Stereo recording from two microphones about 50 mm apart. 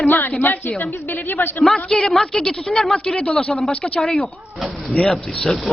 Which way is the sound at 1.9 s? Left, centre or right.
Centre.